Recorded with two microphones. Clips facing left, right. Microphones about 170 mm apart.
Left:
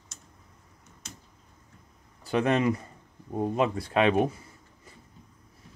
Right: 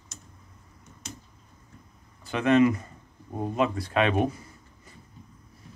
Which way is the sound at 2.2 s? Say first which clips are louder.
Right 4 dB; 35° left (ahead or behind).